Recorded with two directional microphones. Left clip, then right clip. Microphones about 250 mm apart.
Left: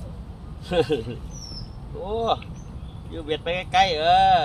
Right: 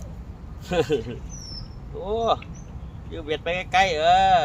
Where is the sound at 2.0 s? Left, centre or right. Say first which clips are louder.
Right 1 dB; right.